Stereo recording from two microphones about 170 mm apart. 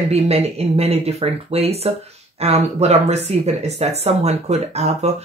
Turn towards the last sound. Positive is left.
turn(degrees=-40)  # may be behind; listen again after turning